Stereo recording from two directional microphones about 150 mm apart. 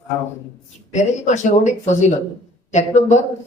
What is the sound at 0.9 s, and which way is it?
A man's voice, 50° left (ahead or behind).